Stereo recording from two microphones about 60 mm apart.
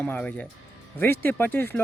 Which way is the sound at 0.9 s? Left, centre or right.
Left.